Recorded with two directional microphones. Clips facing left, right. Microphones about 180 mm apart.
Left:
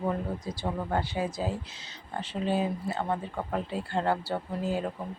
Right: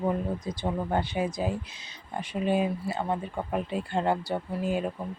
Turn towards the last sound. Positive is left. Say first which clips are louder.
# right 2 dB
turn(degrees=-15)  # may be behind; listen again after turning